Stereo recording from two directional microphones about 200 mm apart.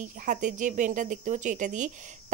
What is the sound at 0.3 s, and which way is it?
A woman's voice, 40° right (ahead or behind).